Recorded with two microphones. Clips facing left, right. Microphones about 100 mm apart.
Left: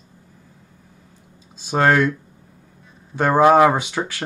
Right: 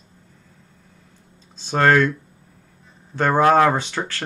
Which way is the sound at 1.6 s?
10° left (ahead or behind).